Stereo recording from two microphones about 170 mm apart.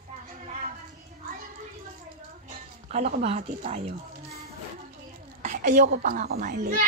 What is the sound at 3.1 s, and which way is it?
Speech, 40° right (ahead or behind).